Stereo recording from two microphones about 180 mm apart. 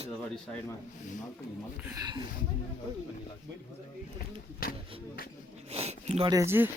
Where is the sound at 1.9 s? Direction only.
20° right (ahead or behind).